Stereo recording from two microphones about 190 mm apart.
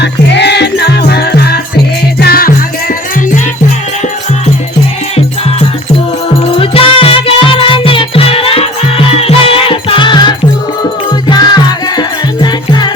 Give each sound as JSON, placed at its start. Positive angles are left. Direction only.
{"t": 0.0, "sound": "music", "side_deg": 65}
{"t": 6.4, "sound": "music", "side_deg": 30}